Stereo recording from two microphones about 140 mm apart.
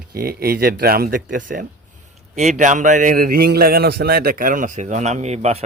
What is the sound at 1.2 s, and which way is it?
Speech, 75° right (ahead or behind).